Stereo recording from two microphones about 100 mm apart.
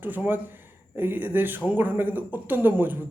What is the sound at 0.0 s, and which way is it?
Speech, 20° right (ahead or behind).